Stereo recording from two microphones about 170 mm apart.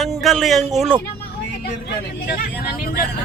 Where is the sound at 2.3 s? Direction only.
65° left (ahead or behind).